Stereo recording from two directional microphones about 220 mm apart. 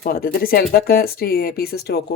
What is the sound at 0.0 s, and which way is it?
Speech, 40° left (ahead or behind).